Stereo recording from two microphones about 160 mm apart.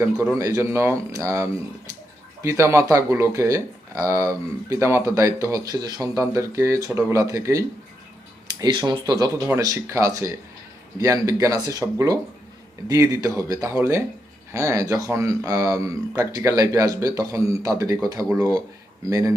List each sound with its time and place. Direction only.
0.0 s speech: 15° right (ahead or behind)